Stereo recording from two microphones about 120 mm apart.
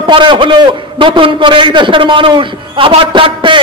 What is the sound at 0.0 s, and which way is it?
A man's voice, 45° right (ahead or behind).